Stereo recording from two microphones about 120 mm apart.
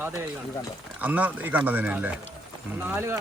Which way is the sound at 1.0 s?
15° right (ahead or behind).